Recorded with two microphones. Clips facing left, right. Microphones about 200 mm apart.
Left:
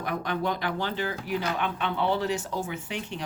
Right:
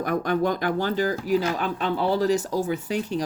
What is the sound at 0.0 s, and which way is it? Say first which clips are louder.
Speech: right 6 dB; 45° right (ahead or behind).